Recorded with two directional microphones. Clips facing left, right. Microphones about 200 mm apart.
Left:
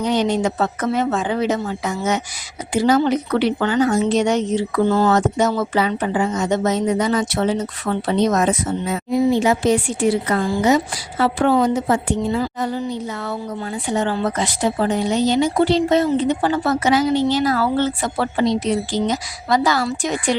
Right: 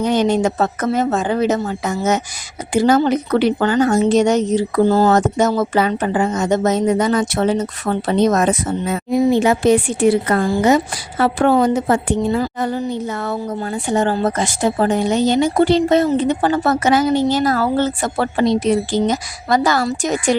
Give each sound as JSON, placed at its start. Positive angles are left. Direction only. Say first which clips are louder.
{"t": 0.0, "sound": "a woman's voice", "louder": "right 3 dB", "side_deg": -50}